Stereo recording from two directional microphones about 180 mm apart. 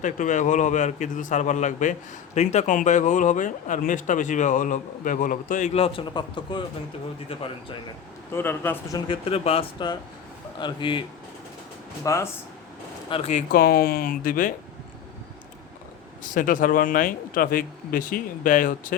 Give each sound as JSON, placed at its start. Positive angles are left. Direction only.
{"t": 0.0, "sound": "a man's voice", "side_deg": 45}
{"t": 8.3, "sound": "speech", "side_deg": 10}
{"t": 9.0, "sound": "speech", "side_deg": 35}
{"t": 12.0, "sound": "speech", "side_deg": 15}
{"t": 13.1, "sound": "speech", "side_deg": 35}
{"t": 13.5, "sound": "speech", "side_deg": 55}
{"t": 16.2, "sound": "a man's voice", "side_deg": 45}